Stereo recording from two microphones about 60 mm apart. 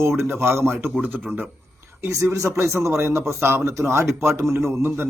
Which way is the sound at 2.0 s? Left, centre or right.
Right.